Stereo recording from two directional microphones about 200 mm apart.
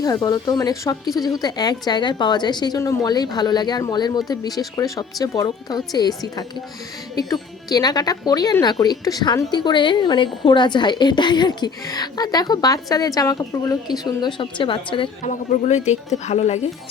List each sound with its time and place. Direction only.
0.0 s speech: 20° left (ahead or behind)